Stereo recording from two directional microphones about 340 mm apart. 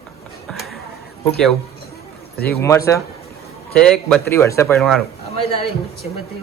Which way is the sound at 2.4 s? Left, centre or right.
Centre.